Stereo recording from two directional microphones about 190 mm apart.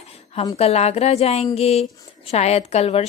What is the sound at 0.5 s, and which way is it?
A woman's voice, 35° left (ahead or behind).